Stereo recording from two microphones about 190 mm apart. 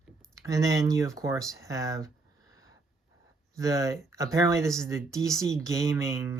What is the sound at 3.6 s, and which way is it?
Speech, 15° right (ahead or behind).